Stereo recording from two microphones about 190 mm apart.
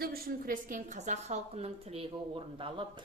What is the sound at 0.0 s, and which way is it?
A woman's voice, 50° right (ahead or behind).